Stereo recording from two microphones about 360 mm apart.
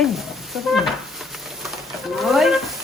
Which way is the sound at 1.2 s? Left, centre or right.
Centre.